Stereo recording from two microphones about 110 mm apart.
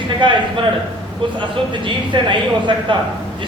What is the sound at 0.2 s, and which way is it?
Speech, 45° right (ahead or behind).